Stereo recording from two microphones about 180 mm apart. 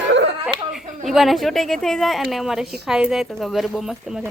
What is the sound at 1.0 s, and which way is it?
A woman's voice, centre (ahead or behind).